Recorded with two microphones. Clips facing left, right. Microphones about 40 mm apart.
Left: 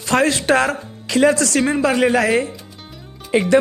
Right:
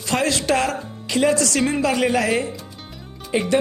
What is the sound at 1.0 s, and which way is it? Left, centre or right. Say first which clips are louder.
Speech: left 5 dB; left.